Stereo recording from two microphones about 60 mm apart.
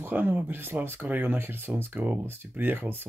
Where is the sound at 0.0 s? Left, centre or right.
Right.